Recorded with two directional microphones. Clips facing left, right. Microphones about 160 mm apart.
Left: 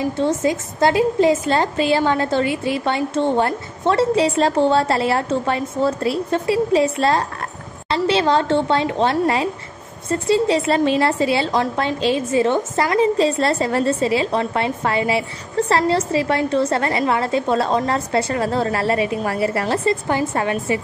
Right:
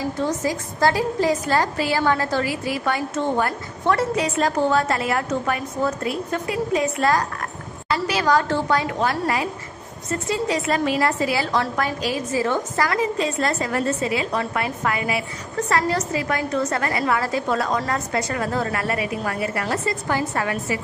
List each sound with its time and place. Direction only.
0.0 s a woman's voice: 25° left (ahead or behind)